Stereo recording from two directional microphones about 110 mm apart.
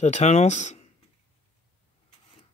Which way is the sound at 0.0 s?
90° left.